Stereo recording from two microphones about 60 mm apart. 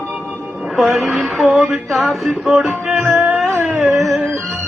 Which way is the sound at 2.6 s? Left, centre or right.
Right.